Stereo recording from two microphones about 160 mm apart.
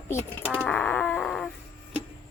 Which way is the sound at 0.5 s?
5° left (ahead or behind).